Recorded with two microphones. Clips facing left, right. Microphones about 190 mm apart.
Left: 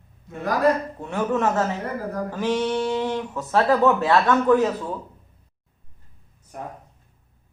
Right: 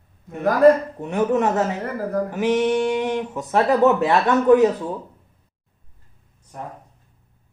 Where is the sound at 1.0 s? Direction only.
20° right (ahead or behind).